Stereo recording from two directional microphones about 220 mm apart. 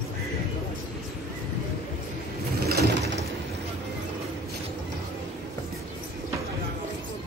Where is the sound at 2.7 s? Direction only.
45° right (ahead or behind).